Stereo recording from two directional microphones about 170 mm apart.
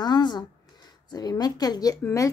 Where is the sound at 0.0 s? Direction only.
25° left (ahead or behind).